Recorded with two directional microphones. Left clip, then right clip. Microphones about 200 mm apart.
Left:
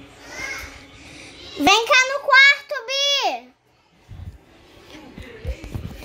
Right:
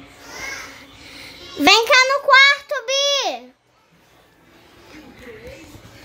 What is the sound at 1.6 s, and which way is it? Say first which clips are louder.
Child singing: right 3 dB; 25° right (ahead or behind).